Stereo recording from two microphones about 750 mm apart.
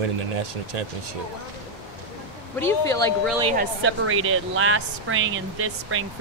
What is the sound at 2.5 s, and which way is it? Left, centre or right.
Speech, centre.